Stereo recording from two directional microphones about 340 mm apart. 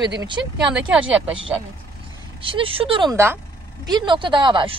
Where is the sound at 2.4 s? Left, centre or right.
Centre.